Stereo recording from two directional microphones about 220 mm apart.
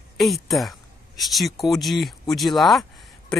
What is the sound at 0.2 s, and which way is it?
Speech, centre (ahead or behind).